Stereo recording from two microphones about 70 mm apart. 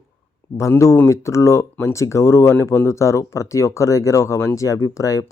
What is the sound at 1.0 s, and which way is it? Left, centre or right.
Speech, left.